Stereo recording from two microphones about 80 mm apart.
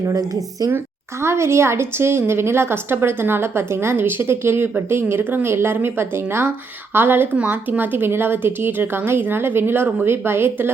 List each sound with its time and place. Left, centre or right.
0.0 s a woman's voice: right
1.2 s a woman's voice: right